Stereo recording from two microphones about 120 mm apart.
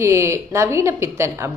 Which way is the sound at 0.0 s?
25° right (ahead or behind).